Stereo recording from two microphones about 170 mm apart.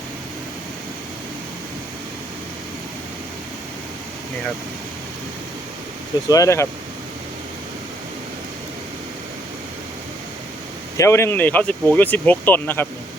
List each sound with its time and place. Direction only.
6.2 s speech: 20° left (ahead or behind)
10.9 s speech: 15° left (ahead or behind)